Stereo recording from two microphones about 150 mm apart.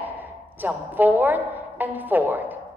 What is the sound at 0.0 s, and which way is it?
A woman's voice, 10° right (ahead or behind).